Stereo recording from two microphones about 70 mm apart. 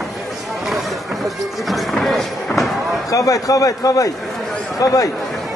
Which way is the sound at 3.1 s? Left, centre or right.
Left.